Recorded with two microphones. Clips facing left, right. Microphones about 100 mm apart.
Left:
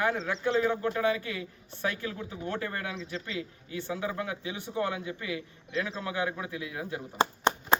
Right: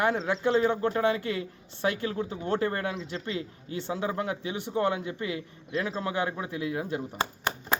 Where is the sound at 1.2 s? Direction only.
55° right (ahead or behind).